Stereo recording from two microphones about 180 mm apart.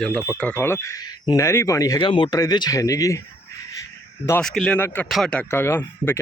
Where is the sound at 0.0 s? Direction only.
5° left (ahead or behind).